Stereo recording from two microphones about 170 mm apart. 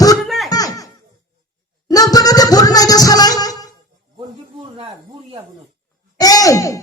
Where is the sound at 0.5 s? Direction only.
20° left (ahead or behind).